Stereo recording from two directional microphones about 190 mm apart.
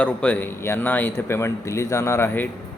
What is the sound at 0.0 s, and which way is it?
Speech, 5° left (ahead or behind).